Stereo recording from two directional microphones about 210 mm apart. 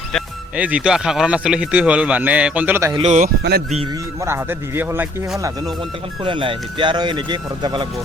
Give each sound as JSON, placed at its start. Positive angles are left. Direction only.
{"t": 0.1, "sound": "speech", "side_deg": -5}
{"t": 2.9, "sound": "speech", "side_deg": -30}
{"t": 4.3, "sound": "speech", "side_deg": -10}
{"t": 6.2, "sound": "speech", "side_deg": -25}